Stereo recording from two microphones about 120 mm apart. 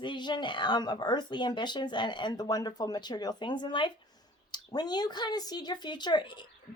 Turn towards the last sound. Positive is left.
turn(degrees=40)  # may be behind; listen again after turning